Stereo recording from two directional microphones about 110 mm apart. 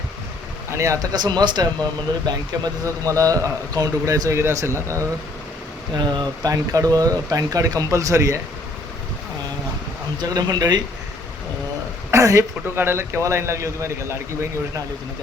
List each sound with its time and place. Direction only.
0.7 s speech: 25° right (ahead or behind)
1.1 s a man's voice: 40° right (ahead or behind)
5.9 s speech: 40° right (ahead or behind)
10.2 s speech: 35° right (ahead or behind)
12.1 s a man's voice: 30° right (ahead or behind)